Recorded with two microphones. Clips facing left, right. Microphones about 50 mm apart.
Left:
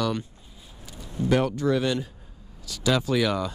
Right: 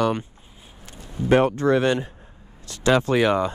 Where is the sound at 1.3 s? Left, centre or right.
Right.